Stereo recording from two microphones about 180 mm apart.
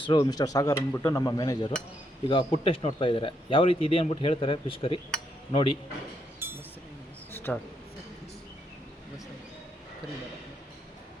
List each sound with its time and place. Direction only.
0.0 s speech: 25° left (ahead or behind)
6.4 s chink: 10° right (ahead or behind)
7.3 s a sound: 10° left (ahead or behind)